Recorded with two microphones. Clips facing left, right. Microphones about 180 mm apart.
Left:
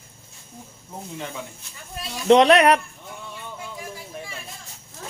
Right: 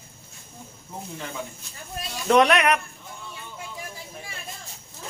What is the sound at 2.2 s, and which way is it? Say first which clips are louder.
Speech: left 5 dB; 25° left (ahead or behind).